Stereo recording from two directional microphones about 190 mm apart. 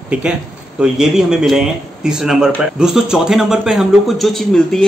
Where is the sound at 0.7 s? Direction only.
5° right (ahead or behind).